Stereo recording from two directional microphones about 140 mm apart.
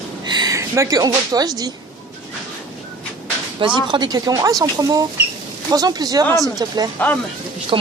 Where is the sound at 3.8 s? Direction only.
35° right (ahead or behind).